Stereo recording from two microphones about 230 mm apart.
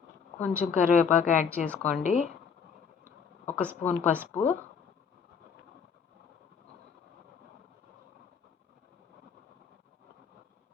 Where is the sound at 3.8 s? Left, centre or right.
Centre.